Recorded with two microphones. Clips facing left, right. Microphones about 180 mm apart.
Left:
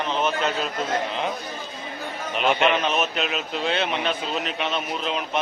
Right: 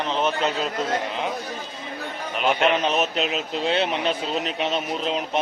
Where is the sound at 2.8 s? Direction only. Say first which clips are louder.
Right 2 dB; 35° right (ahead or behind).